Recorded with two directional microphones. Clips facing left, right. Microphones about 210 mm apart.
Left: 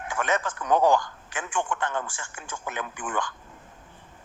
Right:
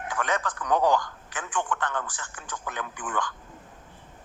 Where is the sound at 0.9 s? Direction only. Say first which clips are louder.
Left 2 dB; 25° left (ahead or behind).